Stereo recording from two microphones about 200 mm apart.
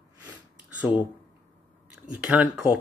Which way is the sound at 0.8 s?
5° right (ahead or behind).